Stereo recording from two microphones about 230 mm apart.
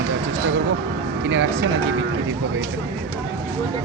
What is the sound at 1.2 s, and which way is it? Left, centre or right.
Speech, right.